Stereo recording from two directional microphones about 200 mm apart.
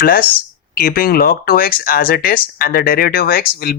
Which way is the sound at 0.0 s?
45° left (ahead or behind).